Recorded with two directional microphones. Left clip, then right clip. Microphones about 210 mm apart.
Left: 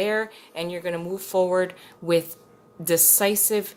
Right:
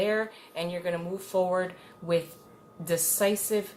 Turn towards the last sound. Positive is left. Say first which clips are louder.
# left 4 dB
turn(degrees=50)  # may be behind; listen again after turning